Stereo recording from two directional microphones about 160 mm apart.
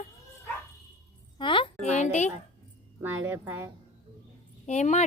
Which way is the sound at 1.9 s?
45° left (ahead or behind).